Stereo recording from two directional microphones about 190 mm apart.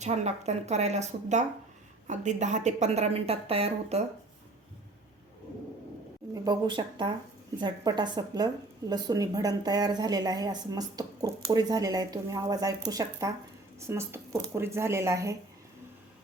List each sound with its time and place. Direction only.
0.0 s a woman's voice: 35° right (ahead or behind)
6.3 s a woman's voice: 20° right (ahead or behind)